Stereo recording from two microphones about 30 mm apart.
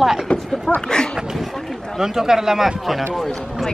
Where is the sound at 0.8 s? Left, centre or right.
Left.